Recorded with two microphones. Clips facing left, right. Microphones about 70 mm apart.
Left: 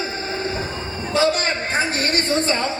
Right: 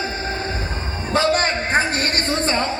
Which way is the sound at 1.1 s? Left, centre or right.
Right.